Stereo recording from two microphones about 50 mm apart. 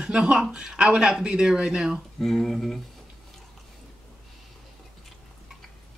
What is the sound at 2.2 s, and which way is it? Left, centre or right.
Speech, centre.